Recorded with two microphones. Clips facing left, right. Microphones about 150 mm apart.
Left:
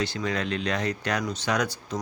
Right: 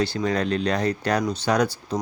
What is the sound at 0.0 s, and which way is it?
Speech, 35° right (ahead or behind).